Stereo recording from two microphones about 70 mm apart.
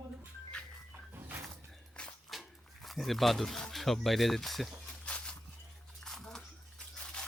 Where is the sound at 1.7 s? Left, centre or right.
Centre.